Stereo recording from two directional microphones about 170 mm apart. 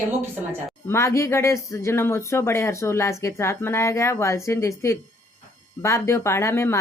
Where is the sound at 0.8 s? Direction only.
15° left (ahead or behind).